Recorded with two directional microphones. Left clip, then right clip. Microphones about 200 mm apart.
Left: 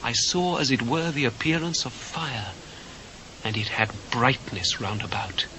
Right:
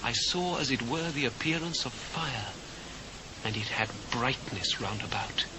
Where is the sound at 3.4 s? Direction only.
25° right (ahead or behind).